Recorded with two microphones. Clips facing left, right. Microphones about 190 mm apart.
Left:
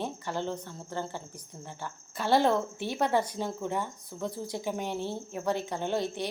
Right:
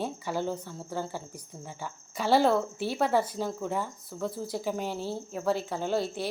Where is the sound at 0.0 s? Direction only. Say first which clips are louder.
Right 2 dB; 10° right (ahead or behind).